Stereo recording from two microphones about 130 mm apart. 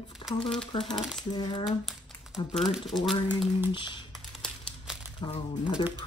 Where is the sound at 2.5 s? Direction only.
Centre (ahead or behind).